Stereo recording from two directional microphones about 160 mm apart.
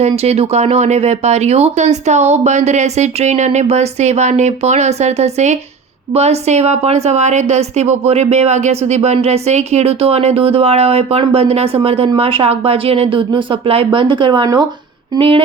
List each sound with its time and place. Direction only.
0.2 s a woman's voice: 40° right (ahead or behind)